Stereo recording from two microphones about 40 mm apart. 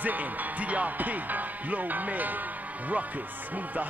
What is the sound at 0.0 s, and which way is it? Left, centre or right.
Speech, right.